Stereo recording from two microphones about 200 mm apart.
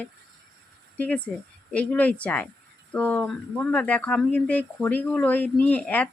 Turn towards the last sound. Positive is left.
turn(degrees=5)  # may be behind; listen again after turning